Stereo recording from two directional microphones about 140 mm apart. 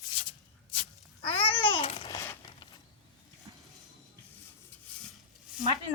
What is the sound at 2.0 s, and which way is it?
Babbling, 25° left (ahead or behind).